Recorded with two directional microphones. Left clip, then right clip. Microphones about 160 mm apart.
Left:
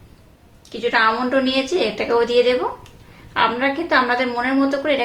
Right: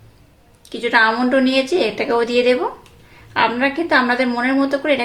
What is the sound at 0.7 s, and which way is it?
A woman's voice, 40° right (ahead or behind).